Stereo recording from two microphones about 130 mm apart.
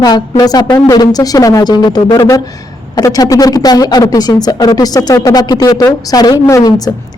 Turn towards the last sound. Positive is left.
turn(degrees=25)  # may be behind; listen again after turning